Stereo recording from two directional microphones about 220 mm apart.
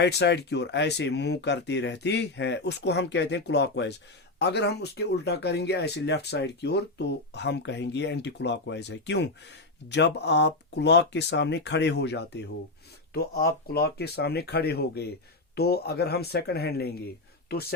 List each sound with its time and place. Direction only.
0.0 s speech: 50° left (ahead or behind)